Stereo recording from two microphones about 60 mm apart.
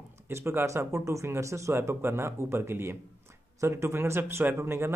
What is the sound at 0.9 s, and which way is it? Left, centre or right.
A man's voice, right.